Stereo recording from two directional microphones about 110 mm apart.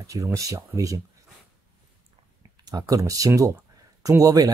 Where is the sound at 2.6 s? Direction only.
35° right (ahead or behind).